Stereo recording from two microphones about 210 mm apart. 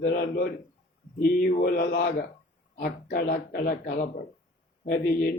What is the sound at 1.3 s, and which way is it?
Speech, 45° left (ahead or behind).